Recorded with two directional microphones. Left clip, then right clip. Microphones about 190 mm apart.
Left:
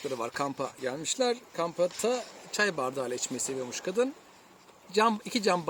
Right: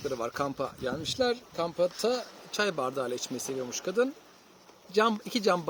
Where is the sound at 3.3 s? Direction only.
35° left (ahead or behind).